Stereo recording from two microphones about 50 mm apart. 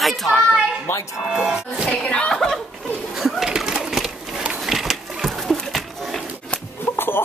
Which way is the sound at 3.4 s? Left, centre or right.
Centre.